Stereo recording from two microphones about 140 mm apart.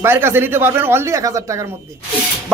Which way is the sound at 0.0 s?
15° right (ahead or behind).